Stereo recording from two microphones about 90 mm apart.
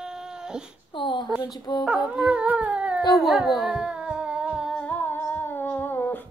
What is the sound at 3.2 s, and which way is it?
Music, centre (ahead or behind).